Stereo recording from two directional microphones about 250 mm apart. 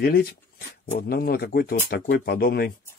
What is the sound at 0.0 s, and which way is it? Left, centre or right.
Speech, left.